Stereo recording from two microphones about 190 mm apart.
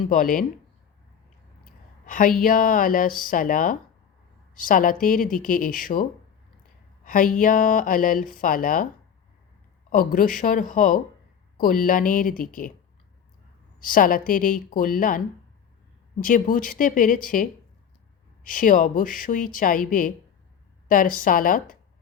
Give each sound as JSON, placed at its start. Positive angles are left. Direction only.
{"t": 0.1, "sound": "speech", "side_deg": 45}
{"t": 2.0, "sound": "a woman's voice", "side_deg": 45}
{"t": 9.9, "sound": "speech", "side_deg": 50}
{"t": 13.7, "sound": "speech", "side_deg": 45}
{"t": 16.2, "sound": "speech", "side_deg": 45}